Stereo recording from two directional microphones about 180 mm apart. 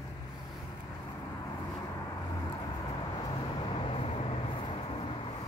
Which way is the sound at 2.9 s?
25° left (ahead or behind).